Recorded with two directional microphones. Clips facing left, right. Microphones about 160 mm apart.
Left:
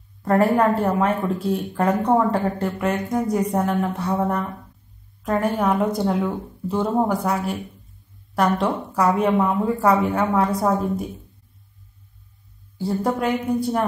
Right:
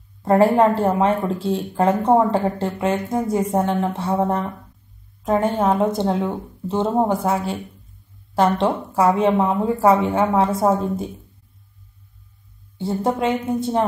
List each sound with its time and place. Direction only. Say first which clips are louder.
0.2 s speech: right 3 dB; 25° right (ahead or behind)
12.7 s speech: right 1 dB; 25° right (ahead or behind)